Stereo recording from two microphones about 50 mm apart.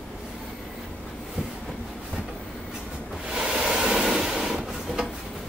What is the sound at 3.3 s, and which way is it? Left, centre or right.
Waves, centre.